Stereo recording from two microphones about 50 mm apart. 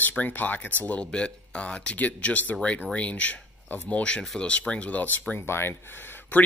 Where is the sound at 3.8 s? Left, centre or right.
Left.